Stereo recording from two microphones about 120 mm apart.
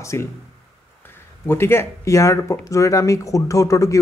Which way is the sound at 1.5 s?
20° left (ahead or behind).